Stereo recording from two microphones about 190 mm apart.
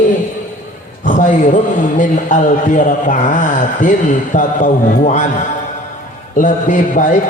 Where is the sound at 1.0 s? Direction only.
40° left (ahead or behind).